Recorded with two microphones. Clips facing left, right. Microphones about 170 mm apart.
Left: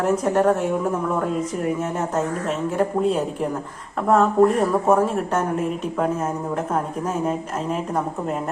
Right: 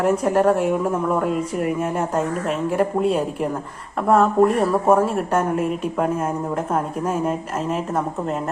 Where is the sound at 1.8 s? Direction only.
10° right (ahead or behind).